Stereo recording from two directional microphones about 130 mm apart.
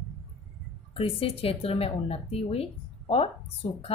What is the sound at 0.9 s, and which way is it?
A woman's voice, 45° left (ahead or behind).